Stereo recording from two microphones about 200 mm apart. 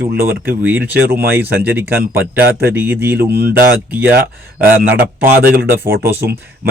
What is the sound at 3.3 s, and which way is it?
Speech, 50° right (ahead or behind).